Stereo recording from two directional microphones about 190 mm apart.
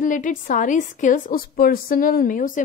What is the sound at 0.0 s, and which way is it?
A woman's voice, 45° left (ahead or behind).